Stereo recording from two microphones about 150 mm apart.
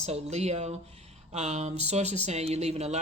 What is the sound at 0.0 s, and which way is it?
Speech, 45° right (ahead or behind).